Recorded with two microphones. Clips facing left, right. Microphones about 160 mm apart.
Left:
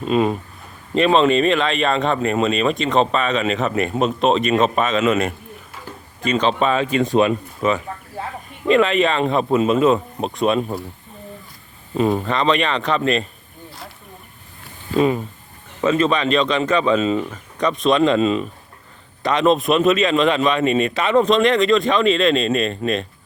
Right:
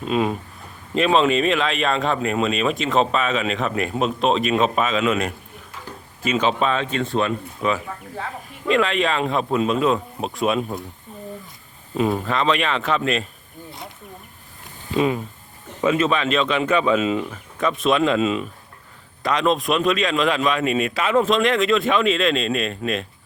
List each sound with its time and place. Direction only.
0.0 s speech: centre (ahead or behind); by 7.3 s 15° left (ahead or behind)
7.6 s speech: centre (ahead or behind)
11.9 s speech: centre (ahead or behind)
13.7 s a sound: centre (ahead or behind)
14.9 s speech: centre (ahead or behind)